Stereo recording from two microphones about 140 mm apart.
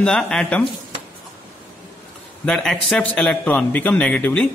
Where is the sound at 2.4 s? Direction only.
5° left (ahead or behind).